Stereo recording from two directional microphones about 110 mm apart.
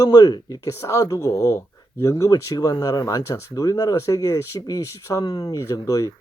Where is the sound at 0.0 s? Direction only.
35° left (ahead or behind).